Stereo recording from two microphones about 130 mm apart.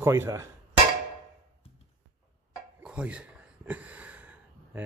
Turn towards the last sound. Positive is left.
turn(degrees=-10)  # may be behind; listen again after turning